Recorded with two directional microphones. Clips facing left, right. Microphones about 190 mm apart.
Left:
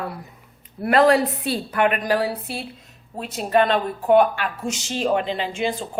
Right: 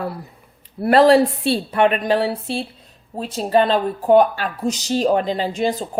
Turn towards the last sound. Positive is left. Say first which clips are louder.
# right 4 dB
turn(degrees=-40)  # may be behind; listen again after turning